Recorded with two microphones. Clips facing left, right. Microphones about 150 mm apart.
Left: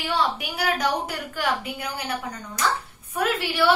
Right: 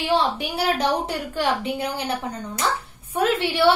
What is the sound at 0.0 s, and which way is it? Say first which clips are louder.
A woman's voice: right 4 dB; 35° right (ahead or behind).